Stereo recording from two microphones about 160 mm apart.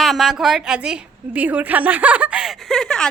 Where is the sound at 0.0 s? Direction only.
Centre (ahead or behind).